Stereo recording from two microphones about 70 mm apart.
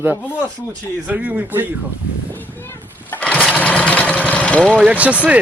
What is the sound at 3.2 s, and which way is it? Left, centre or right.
Lawn mower, centre.